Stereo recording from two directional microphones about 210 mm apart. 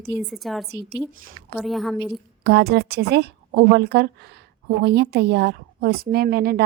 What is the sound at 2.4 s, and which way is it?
Speech, 50° right (ahead or behind).